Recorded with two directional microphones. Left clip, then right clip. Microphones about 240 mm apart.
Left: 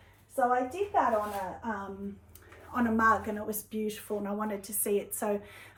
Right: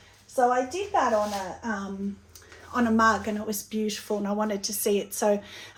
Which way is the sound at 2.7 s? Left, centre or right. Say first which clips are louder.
Right 4 dB; centre.